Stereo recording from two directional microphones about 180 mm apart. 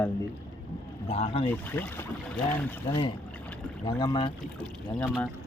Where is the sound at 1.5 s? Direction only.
10° left (ahead or behind).